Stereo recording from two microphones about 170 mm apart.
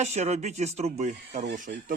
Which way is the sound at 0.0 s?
40° right (ahead or behind).